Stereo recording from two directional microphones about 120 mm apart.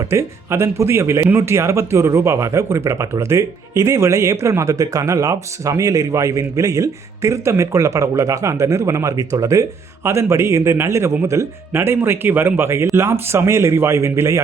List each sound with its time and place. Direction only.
0.0 s speech: 25° right (ahead or behind)